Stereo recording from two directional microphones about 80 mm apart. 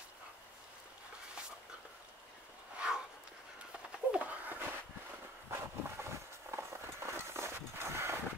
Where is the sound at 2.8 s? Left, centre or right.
Centre.